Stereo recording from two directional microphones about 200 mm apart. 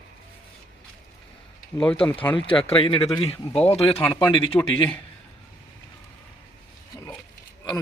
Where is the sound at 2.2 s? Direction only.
25° left (ahead or behind).